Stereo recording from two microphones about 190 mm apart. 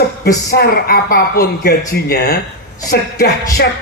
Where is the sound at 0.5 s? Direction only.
55° left (ahead or behind).